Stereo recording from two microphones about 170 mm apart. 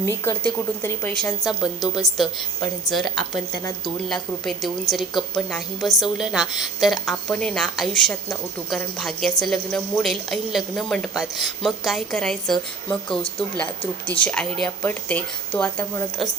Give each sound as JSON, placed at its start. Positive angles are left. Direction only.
{"t": 0.0, "sound": "speech", "side_deg": 15}
{"t": 1.5, "sound": "a woman's voice", "side_deg": 0}